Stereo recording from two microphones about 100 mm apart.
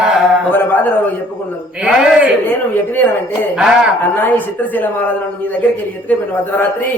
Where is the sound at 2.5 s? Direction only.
20° left (ahead or behind).